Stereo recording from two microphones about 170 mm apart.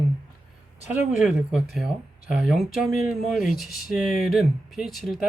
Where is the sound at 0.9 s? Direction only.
5° right (ahead or behind).